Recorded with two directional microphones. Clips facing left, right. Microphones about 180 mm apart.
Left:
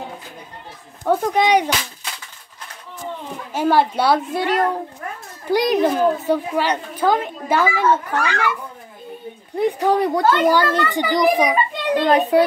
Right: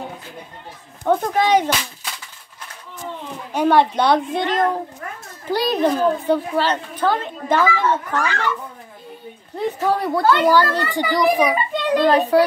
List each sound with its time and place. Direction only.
1.0 s a child's voice: 15° left (ahead or behind)
3.5 s a child's voice: 5° left (ahead or behind)
9.6 s a child's voice: 15° left (ahead or behind)
10.2 s a child's voice: 45° left (ahead or behind)
10.5 s a child's voice: 20° left (ahead or behind)